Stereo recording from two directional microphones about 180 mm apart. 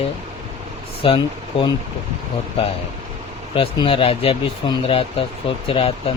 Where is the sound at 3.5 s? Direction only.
30° left (ahead or behind).